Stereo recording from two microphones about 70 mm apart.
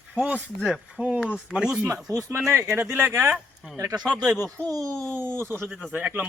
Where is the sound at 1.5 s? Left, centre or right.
Centre.